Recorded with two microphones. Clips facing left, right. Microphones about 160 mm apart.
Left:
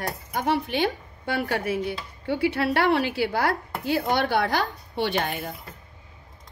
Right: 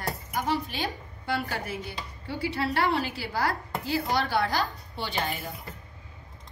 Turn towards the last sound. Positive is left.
turn(degrees=60)  # may be behind; listen again after turning